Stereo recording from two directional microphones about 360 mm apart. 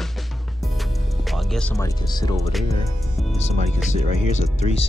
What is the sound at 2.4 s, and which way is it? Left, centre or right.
Speech, centre.